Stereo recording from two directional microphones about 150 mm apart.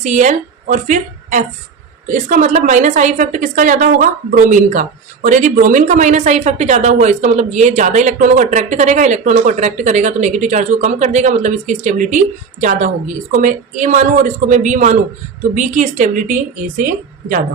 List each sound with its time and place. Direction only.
0.0 s a woman's voice: 50° right (ahead or behind)